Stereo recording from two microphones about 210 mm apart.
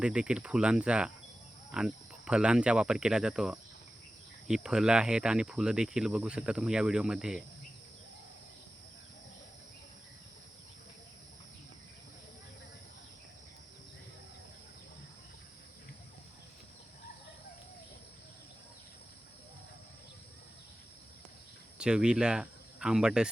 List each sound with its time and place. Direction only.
0.0 s speech: 5° right (ahead or behind)
21.8 s speech: 5° right (ahead or behind)